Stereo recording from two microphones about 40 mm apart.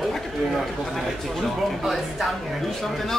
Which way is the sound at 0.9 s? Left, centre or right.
Centre.